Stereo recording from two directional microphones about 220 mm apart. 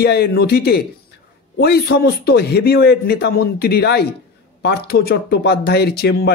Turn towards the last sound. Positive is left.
turn(degrees=45)  # may be behind; listen again after turning